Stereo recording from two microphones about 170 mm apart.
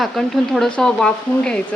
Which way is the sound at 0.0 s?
Centre (ahead or behind).